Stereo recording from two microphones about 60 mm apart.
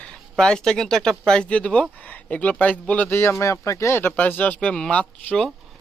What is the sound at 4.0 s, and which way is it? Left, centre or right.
Speech, left.